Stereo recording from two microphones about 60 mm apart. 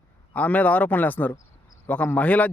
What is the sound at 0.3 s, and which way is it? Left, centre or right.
Speech, left.